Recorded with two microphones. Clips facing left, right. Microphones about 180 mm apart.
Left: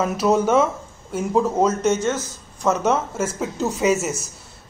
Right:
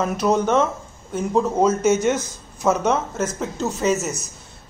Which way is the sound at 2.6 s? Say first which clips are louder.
Even; centre (ahead or behind).